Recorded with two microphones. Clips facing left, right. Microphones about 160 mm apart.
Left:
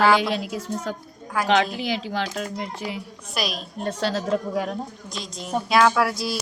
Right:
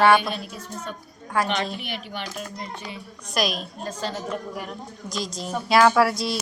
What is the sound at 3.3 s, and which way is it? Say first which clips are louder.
Speech: right 3 dB; centre (ahead or behind).